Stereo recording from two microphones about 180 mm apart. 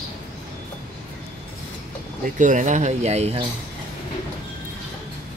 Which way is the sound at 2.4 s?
45° right (ahead or behind).